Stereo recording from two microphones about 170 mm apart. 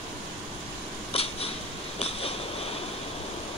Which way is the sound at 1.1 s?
35° left (ahead or behind).